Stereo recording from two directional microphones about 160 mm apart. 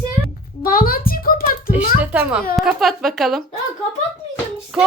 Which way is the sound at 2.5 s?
Centre (ahead or behind).